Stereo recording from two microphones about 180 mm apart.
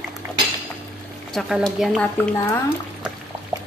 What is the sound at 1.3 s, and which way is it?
A woman's voice, centre (ahead or behind).